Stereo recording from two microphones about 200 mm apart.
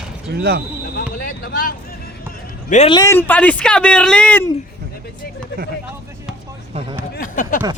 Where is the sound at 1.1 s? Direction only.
45° left (ahead or behind).